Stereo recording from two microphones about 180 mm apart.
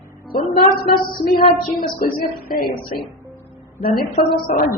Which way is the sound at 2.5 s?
55° left (ahead or behind).